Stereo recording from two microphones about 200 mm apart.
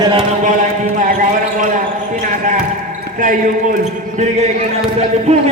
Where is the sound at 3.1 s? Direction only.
45° right (ahead or behind).